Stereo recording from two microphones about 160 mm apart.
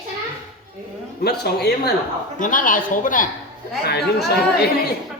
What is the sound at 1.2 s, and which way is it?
Speech, 85° left.